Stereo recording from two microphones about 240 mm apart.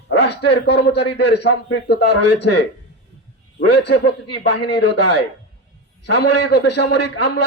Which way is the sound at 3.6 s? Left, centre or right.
Left.